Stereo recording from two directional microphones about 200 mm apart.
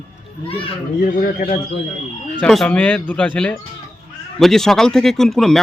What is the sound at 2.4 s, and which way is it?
Speech, 5° left (ahead or behind).